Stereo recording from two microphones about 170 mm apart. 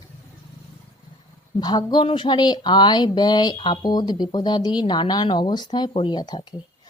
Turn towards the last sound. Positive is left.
turn(degrees=25)  # may be behind; listen again after turning